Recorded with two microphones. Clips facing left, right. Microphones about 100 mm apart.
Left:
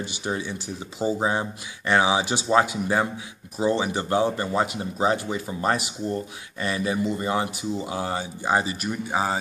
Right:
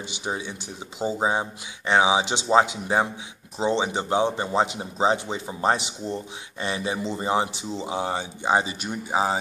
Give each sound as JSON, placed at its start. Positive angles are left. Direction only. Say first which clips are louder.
{"t": 0.0, "sound": "speech", "louder": "left 2 dB", "side_deg": -15}